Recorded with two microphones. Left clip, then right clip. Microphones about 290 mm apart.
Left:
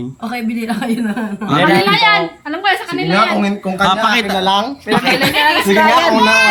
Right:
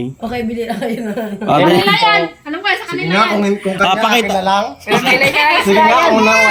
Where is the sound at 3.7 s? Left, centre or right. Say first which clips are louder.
Even; left.